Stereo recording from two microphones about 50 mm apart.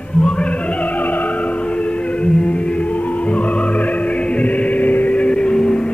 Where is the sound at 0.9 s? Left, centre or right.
Left.